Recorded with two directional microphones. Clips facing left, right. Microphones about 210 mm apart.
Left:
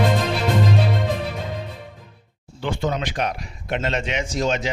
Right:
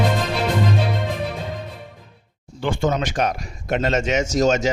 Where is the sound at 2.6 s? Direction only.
50° right (ahead or behind).